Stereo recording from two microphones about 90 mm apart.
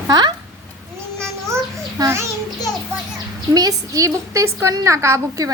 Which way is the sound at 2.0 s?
40° right (ahead or behind).